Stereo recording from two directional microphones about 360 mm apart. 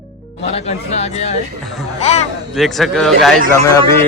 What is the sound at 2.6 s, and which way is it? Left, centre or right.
Speech, centre.